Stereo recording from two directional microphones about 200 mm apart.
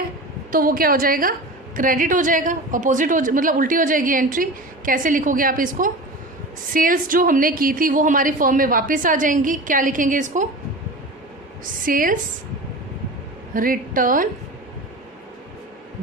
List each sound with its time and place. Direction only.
0.5 s a woman's voice: 45° right (ahead or behind)
11.9 s a woman's voice: 45° right (ahead or behind)
13.5 s a woman's voice: 45° right (ahead or behind)